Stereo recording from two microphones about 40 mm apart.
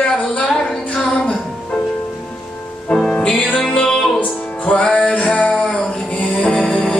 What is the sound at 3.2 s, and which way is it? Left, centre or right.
Music, left.